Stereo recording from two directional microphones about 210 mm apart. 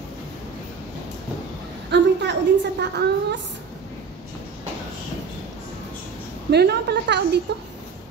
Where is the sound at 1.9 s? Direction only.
55° right (ahead or behind).